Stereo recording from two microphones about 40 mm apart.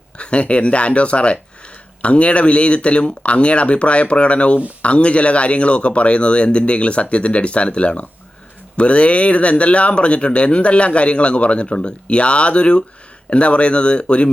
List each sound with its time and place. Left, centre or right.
0.2 s speech: left